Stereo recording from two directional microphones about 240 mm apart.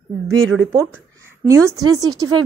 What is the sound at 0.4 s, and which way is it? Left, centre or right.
Speech, right.